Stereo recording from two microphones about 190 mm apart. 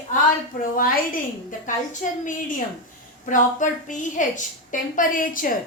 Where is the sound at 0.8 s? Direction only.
45° left (ahead or behind).